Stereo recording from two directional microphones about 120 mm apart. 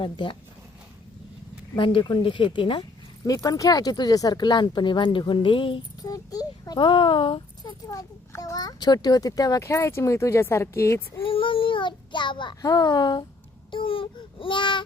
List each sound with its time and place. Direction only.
0.0 s speech: 40° left (ahead or behind)
1.7 s speech: 45° left (ahead or behind)
3.2 s speech: 30° left (ahead or behind); by 5.8 s 45° left (ahead or behind)
6.0 s a sound: 30° left (ahead or behind)
6.7 s speech: 40° left (ahead or behind)
7.9 s a child's voice: 30° left (ahead or behind)
11.2 s child singing: 45° left (ahead or behind)
13.7 s speech: 45° left (ahead or behind)